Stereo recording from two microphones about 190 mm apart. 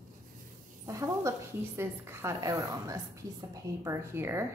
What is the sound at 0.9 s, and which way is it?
A woman's voice, 15° right (ahead or behind).